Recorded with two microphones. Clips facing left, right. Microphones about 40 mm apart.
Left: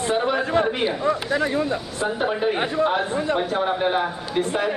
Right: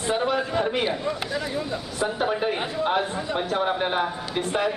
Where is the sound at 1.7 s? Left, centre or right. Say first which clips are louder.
Left 2 dB; centre.